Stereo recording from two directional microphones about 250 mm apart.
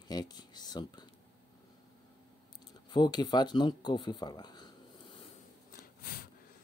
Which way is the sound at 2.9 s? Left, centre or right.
Centre.